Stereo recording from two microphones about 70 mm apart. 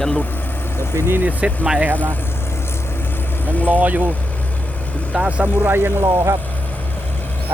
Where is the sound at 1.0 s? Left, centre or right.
Right.